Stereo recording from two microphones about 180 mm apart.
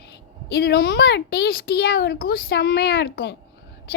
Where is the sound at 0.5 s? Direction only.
60° left (ahead or behind).